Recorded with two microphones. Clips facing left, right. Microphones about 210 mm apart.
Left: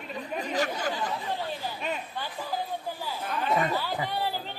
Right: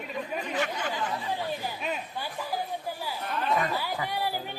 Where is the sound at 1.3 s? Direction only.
15° right (ahead or behind).